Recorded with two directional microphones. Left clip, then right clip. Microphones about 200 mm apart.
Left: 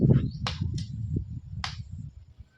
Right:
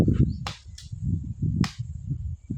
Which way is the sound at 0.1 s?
10° left (ahead or behind).